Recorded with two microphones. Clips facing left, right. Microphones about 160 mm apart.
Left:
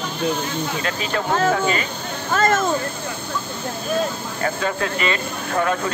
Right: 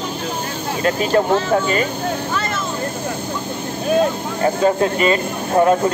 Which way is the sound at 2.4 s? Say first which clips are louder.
Left 5 dB; 50° left (ahead or behind).